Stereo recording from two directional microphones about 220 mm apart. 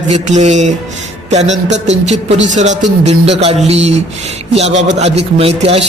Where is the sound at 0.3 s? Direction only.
30° right (ahead or behind).